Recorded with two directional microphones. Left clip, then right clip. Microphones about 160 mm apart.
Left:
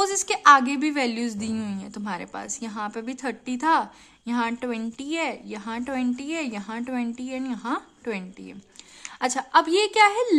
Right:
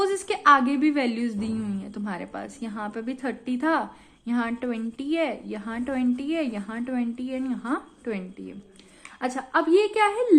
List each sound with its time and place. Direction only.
0.0 s a woman's voice: 35° left (ahead or behind)